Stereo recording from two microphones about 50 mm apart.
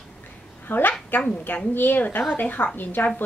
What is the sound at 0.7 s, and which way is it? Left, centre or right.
A woman's voice, left.